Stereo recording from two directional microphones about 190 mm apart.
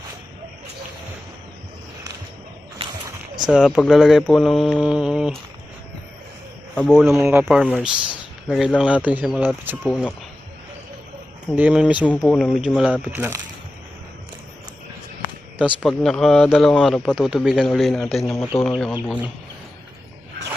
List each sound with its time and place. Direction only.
3.5 s a man's voice: centre (ahead or behind)
6.7 s a man's voice: 5° left (ahead or behind)
9.9 s speech: 10° left (ahead or behind)
11.5 s speech: 5° right (ahead or behind)
12.0 s a man's voice: 5° left (ahead or behind); by 13.4 s 10° right (ahead or behind)
15.5 s a man's voice: 5° right (ahead or behind)